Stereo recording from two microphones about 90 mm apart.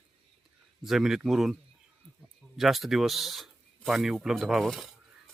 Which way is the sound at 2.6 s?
Centre (ahead or behind).